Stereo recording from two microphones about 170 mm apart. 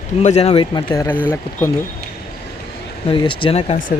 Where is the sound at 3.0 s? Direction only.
30° left (ahead or behind).